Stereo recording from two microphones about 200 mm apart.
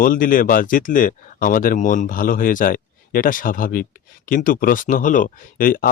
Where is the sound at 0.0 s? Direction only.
45° left (ahead or behind).